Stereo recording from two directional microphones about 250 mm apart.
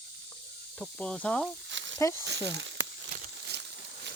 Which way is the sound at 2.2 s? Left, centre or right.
Right.